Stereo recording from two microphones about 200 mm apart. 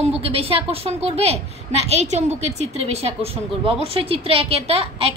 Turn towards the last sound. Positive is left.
turn(degrees=-30)  # may be behind; listen again after turning